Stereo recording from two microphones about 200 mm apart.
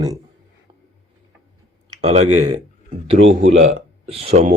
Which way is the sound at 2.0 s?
30° right (ahead or behind).